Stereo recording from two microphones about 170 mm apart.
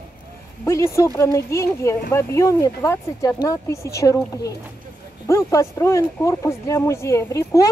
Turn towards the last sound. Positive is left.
turn(degrees=20)  # may be behind; listen again after turning